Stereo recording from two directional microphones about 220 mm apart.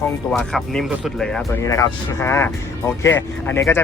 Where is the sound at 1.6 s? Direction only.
15° left (ahead or behind).